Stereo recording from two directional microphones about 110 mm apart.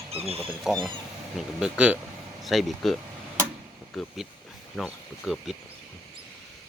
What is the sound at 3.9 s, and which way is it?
Speech, 5° right (ahead or behind).